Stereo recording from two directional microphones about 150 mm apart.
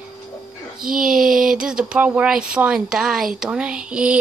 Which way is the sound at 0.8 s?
70° right (ahead or behind).